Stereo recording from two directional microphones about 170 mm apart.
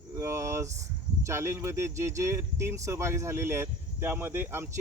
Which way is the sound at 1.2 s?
15° right (ahead or behind).